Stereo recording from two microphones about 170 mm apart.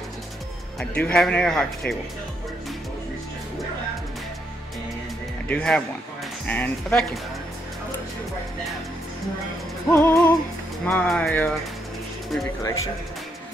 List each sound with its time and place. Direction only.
0.7 s speech: 5° left (ahead or behind)
5.5 s speech: 5° left (ahead or behind)
9.8 s speech: 15° left (ahead or behind)
10.9 s speech: 5° left (ahead or behind)